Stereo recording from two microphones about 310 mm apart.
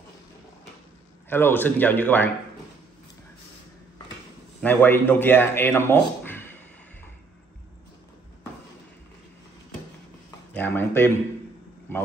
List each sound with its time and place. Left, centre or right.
1.3 s speech: centre
4.6 s a man's voice: centre
10.5 s speech: centre